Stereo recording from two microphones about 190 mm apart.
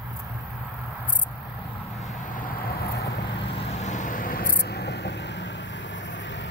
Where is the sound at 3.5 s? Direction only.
40° left (ahead or behind).